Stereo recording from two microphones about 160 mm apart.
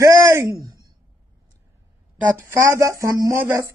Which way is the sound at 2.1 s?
10° right (ahead or behind).